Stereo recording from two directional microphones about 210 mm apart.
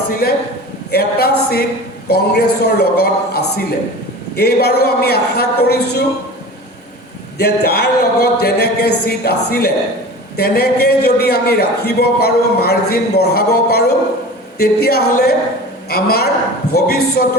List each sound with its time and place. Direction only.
0.1 s a man's voice: 45° left (ahead or behind)
7.3 s a man's voice: 50° left (ahead or behind)